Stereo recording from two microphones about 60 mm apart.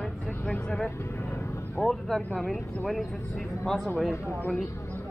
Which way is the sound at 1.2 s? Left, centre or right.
Left.